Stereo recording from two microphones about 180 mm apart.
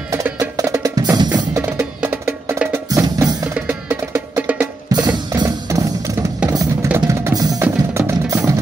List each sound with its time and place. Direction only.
0.1 s percussion: 15° right (ahead or behind)
1.7 s music: 5° right (ahead or behind)
3.5 s music: 10° right (ahead or behind)
4.9 s music: 20° right (ahead or behind)
6.5 s drum: 15° right (ahead or behind)
8.1 s music: 15° right (ahead or behind)